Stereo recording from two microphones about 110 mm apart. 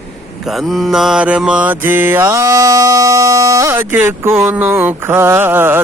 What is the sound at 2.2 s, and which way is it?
Mantra, 30° right (ahead or behind).